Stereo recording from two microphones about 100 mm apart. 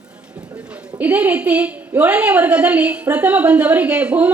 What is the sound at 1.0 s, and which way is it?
A woman's voice, 15° right (ahead or behind).